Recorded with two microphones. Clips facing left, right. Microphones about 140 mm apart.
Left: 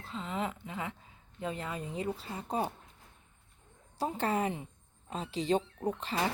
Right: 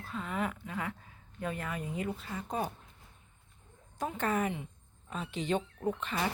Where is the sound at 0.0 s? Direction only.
20° left (ahead or behind).